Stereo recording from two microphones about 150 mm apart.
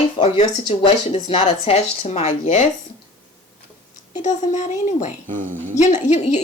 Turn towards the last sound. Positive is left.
turn(degrees=50)  # may be behind; listen again after turning